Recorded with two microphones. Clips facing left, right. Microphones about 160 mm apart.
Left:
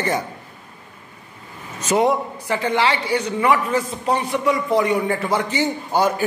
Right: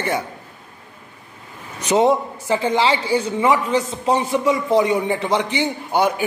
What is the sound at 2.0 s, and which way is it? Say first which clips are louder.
A man's voice: right 2 dB; 25° right (ahead or behind).